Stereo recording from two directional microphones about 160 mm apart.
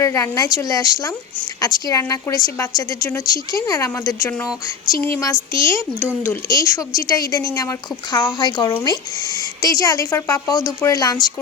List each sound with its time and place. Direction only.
0.0 s a woman's voice: 20° left (ahead or behind)